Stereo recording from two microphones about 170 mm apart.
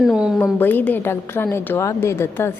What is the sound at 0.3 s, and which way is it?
A woman's voice, 10° left (ahead or behind).